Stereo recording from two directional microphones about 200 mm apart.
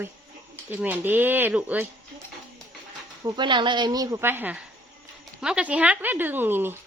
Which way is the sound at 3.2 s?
25° right (ahead or behind).